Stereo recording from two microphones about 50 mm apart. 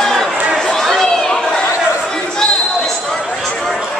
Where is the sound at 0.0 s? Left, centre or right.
Centre.